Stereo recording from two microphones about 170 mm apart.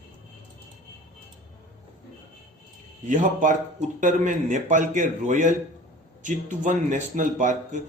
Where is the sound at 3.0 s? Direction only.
50° right (ahead or behind).